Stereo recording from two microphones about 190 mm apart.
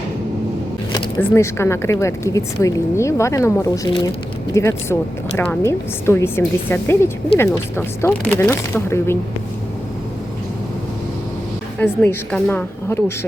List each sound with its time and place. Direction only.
0.9 s a sound: 20° left (ahead or behind)
1.3 s a woman's voice: 15° left (ahead or behind)
11.8 s a woman's voice: 10° left (ahead or behind)